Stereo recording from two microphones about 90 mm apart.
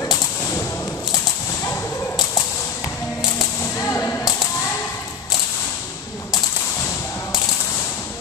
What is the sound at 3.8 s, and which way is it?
Whip, 25° left (ahead or behind).